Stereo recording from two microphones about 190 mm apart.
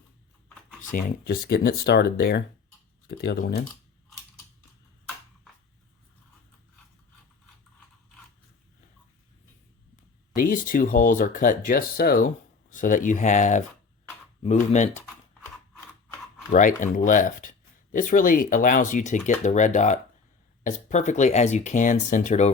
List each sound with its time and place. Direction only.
0.9 s speech: 45° left (ahead or behind)
10.3 s speech: 50° left (ahead or behind)
16.5 s speech: 45° left (ahead or behind)